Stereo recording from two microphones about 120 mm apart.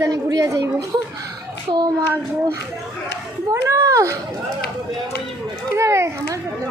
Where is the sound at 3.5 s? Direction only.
25° right (ahead or behind).